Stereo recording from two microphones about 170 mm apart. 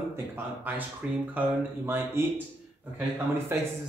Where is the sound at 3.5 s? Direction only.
15° right (ahead or behind).